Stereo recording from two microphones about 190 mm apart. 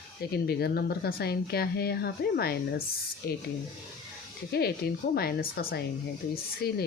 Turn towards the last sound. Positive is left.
turn(degrees=55)  # may be behind; listen again after turning